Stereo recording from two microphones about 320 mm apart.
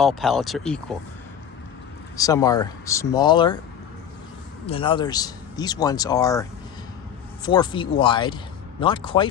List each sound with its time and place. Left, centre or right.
0.0 s speech: centre
2.1 s speech: centre
4.6 s speech: centre
7.4 s speech: centre